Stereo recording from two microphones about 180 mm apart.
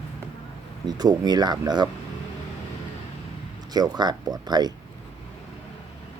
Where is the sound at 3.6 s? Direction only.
20° right (ahead or behind).